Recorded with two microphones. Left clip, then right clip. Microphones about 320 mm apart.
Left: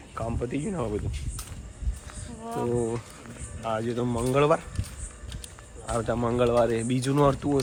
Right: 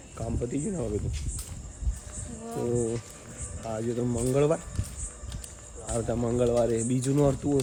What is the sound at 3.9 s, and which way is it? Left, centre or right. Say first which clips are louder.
Speech: left 1 dB; centre.